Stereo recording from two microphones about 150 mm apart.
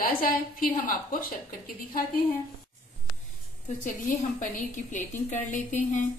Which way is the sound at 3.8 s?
60° left (ahead or behind).